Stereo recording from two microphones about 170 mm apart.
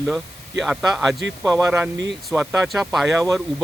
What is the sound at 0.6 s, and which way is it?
Speech, centre (ahead or behind).